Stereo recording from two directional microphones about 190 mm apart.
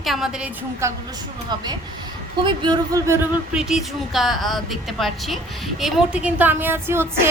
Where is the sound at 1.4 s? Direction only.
20° right (ahead or behind).